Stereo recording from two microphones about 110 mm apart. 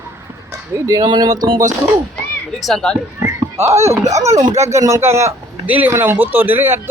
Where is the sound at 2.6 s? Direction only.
5° left (ahead or behind).